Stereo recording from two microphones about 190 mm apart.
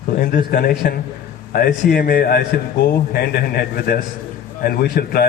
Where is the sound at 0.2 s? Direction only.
50° left (ahead or behind).